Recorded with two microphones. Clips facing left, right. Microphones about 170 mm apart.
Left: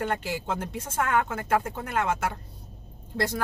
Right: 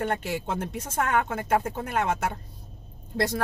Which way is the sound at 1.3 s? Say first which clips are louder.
Right 1 dB; 25° right (ahead or behind).